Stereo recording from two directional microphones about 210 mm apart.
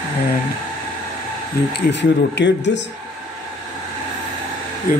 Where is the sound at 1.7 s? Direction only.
55° left (ahead or behind).